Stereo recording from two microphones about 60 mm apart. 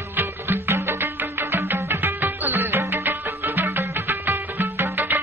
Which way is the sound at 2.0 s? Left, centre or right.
Right.